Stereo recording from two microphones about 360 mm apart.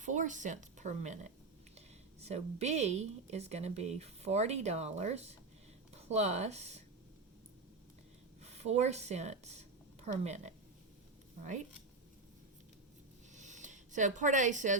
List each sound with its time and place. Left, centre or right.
0.0 s a woman's voice: right
8.4 s speech: centre
13.3 s a sound: centre